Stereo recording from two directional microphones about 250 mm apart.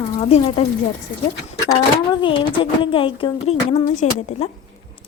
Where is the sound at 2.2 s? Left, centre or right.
Left.